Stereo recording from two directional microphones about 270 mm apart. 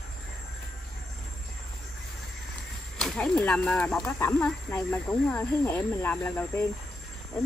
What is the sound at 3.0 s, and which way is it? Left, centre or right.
Speech, centre.